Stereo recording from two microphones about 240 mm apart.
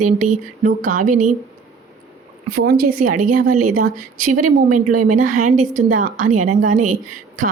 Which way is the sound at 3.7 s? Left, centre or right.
Right.